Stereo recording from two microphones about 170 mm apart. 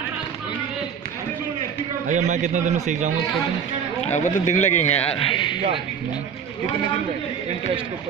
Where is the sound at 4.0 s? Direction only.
40° left (ahead or behind).